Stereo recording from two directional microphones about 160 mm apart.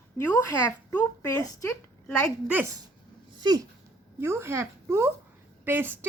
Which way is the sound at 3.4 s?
25° right (ahead or behind).